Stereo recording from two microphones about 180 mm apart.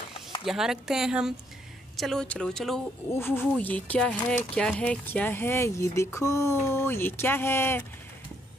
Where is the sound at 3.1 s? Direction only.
10° left (ahead or behind).